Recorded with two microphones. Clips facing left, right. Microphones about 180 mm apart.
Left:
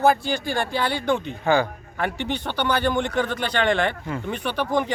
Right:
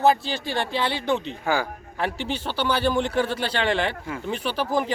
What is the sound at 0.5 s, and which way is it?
Speech, 25° right (ahead or behind).